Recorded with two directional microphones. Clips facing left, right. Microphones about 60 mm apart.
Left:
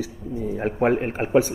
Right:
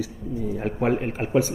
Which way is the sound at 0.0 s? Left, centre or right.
Left.